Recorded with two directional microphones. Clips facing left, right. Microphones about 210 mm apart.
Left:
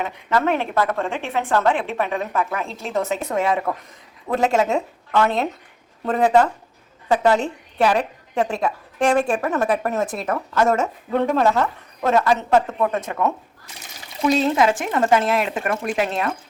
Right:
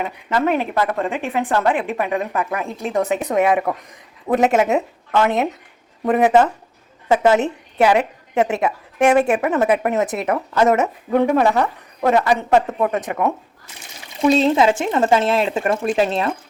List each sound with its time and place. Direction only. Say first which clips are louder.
0.0 s a woman's voice: right 1 dB; 10° right (ahead or behind)
14.3 s speech: right 3 dB; 25° right (ahead or behind)